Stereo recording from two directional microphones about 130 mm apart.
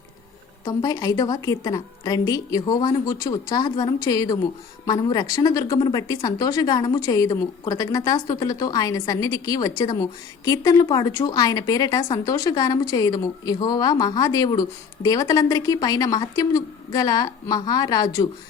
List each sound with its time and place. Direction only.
0.6 s a woman's voice: 30° left (ahead or behind)